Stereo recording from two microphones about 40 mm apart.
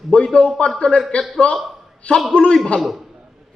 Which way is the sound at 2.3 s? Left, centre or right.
Left.